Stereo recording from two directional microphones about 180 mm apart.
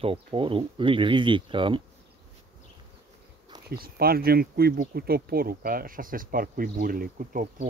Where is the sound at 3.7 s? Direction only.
55° right (ahead or behind).